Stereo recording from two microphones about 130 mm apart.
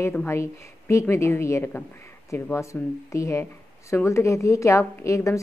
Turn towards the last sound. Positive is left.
turn(degrees=25)  # may be behind; listen again after turning